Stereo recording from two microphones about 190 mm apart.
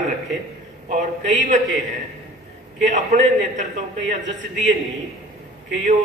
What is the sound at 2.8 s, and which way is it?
Speech, 40° right (ahead or behind).